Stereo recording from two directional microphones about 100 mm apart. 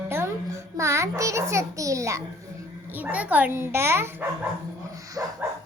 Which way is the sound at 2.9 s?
15° right (ahead or behind).